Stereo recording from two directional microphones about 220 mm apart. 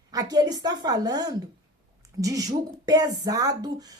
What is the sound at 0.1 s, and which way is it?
A woman's voice, 15° right (ahead or behind).